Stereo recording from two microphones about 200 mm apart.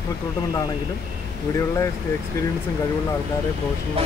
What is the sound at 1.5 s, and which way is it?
Speech, 15° left (ahead or behind).